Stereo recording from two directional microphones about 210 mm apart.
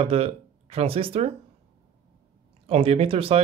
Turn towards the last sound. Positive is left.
turn(degrees=-25)  # may be behind; listen again after turning